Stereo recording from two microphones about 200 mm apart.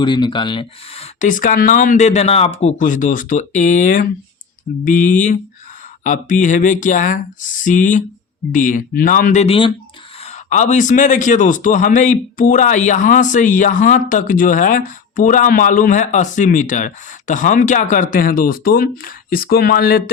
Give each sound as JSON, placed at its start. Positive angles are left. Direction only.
{"t": 0.0, "sound": "a man's voice", "side_deg": 25}